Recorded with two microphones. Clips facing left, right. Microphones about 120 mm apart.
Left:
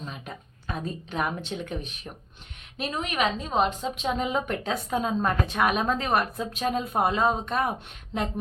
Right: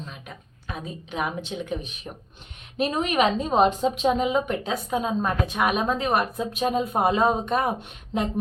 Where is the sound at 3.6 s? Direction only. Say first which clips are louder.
Right 6 dB; 30° right (ahead or behind).